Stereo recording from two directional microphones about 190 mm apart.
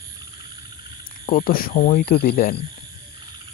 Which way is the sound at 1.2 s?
45° left (ahead or behind).